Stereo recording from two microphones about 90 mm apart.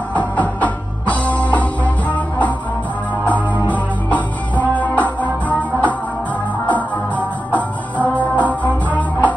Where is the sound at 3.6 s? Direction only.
15° left (ahead or behind).